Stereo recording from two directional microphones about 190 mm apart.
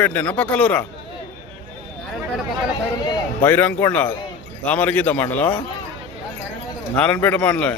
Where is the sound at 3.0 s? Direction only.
20° left (ahead or behind).